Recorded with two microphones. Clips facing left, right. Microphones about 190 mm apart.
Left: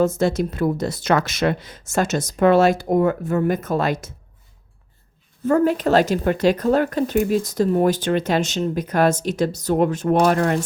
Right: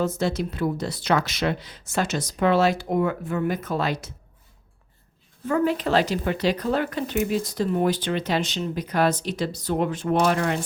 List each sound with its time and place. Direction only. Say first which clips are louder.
0.0 s speech: left 6 dB; 45° left (ahead or behind)
5.5 s speech: left 5 dB; 45° left (ahead or behind)